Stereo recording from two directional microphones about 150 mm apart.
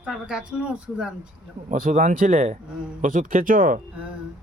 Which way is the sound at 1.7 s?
60° right (ahead or behind).